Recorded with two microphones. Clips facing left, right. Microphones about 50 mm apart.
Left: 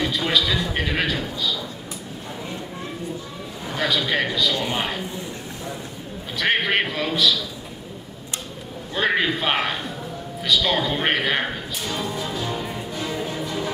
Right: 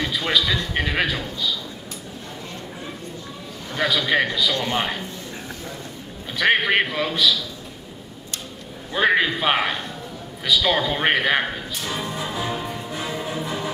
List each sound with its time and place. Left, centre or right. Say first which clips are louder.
0.0 s a man's voice: even; centre
3.7 s a man's voice: right 2 dB; centre
6.3 s a man's voice: right 2 dB; centre
8.9 s a man's voice: right 2 dB; centre
11.9 s music: left 1 dB; centre